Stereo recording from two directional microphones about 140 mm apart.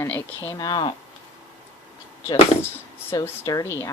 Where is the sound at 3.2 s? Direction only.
25° left (ahead or behind).